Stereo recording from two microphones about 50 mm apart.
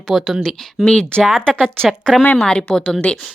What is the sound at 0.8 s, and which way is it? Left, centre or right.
Speech, centre.